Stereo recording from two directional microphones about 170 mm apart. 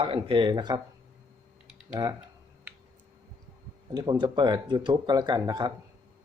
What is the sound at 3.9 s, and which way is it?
Speech, 25° right (ahead or behind).